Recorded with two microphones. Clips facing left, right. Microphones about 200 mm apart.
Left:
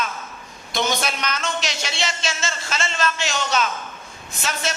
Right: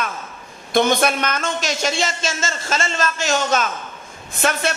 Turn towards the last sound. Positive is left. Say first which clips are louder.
# right 7 dB
turn(degrees=-55)  # may be behind; listen again after turning